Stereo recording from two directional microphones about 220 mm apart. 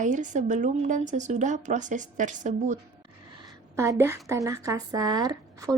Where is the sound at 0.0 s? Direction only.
35° right (ahead or behind).